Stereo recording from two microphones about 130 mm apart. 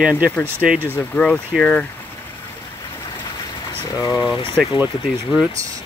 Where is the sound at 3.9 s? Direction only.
30° left (ahead or behind).